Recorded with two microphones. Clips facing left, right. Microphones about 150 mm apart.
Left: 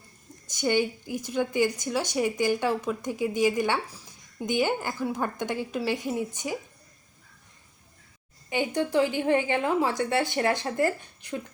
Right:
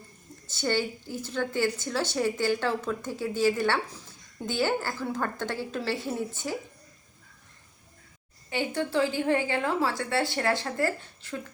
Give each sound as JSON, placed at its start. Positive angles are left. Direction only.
{"t": 0.4, "sound": "a woman's voice", "side_deg": 15}
{"t": 8.4, "sound": "a woman's voice", "side_deg": 15}